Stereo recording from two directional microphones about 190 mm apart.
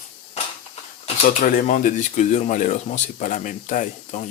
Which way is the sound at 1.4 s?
45° left (ahead or behind).